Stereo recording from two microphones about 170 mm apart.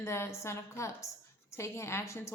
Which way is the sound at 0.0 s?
15° left (ahead or behind).